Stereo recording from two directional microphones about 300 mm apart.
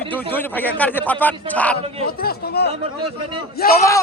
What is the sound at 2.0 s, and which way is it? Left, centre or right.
Speech, left.